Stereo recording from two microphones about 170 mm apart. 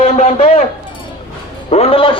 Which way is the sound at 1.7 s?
35° left (ahead or behind).